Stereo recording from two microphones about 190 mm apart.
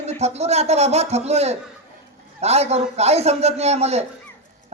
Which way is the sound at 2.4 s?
35° right (ahead or behind).